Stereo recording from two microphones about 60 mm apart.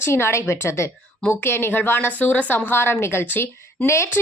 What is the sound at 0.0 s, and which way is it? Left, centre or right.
A woman's voice, left.